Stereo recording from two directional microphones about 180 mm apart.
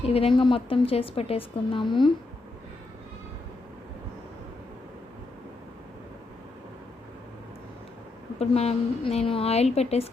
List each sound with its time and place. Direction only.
0.0 s a woman's voice: 35° left (ahead or behind)
8.4 s a woman's voice: 35° left (ahead or behind)